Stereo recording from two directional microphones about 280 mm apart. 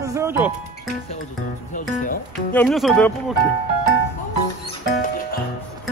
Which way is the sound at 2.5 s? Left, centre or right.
Centre.